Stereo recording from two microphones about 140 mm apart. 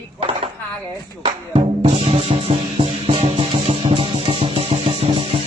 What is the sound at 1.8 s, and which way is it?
Music, 40° right (ahead or behind).